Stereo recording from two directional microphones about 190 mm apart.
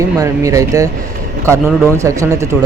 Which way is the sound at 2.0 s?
15° right (ahead or behind).